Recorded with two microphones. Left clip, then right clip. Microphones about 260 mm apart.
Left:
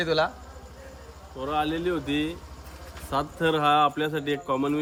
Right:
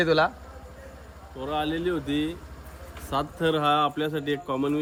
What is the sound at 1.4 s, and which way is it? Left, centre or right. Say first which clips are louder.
A man's voice: left 1 dB; centre.